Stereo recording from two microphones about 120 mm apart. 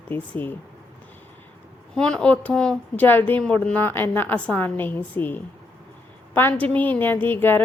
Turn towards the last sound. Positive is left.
turn(degrees=15)  # may be behind; listen again after turning